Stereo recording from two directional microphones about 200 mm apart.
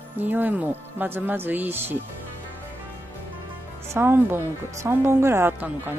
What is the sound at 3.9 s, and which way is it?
Speech, 10° right (ahead or behind).